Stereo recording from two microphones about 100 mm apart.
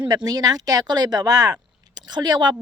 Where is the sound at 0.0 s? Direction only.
50° right (ahead or behind).